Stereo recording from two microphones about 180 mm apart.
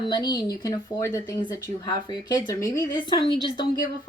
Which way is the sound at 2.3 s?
20° left (ahead or behind).